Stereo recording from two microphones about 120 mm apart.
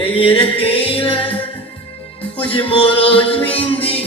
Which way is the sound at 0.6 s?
50° left (ahead or behind).